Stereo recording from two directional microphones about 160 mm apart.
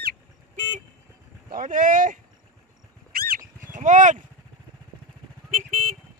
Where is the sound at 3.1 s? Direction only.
65° right (ahead or behind).